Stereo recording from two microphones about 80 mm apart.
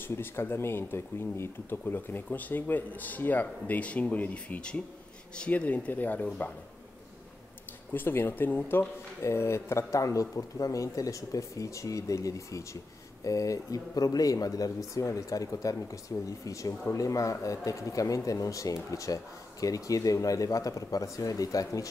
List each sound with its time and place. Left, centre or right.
0.0 s speech: left
7.9 s speech: left
9.2 s speech: left